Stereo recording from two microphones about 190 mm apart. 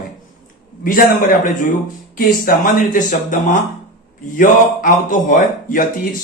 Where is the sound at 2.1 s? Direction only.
45° left (ahead or behind).